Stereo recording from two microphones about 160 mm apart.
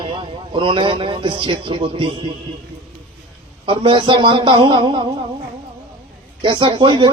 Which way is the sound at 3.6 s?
30° right (ahead or behind).